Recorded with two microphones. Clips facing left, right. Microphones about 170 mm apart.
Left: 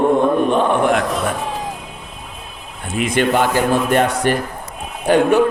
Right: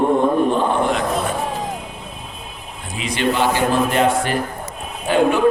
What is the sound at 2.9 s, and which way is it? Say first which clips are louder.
A man's voice: left 4 dB; 50° left (ahead or behind).